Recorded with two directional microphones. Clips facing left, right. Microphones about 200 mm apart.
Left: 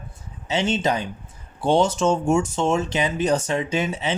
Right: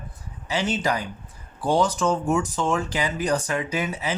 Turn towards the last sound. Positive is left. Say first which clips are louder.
# left 3 dB
turn(degrees=25)  # may be behind; listen again after turning